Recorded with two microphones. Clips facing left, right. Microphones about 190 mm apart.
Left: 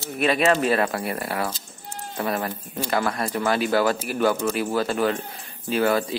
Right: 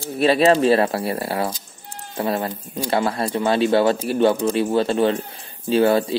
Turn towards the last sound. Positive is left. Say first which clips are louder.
# right 5 dB
turn(degrees=-30)  # may be behind; listen again after turning